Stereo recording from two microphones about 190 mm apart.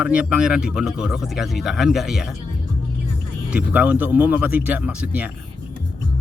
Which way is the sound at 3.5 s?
5° right (ahead or behind).